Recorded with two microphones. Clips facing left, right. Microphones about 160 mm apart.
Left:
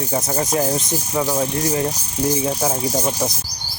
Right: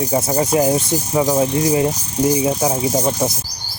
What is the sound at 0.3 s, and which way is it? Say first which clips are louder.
Speech: right 5 dB; 10° right (ahead or behind).